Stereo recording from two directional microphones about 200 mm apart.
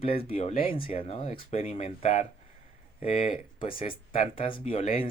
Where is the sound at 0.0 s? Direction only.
30° left (ahead or behind).